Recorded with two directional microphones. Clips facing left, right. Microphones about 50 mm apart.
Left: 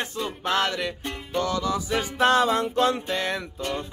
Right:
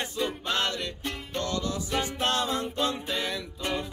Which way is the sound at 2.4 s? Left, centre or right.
Left.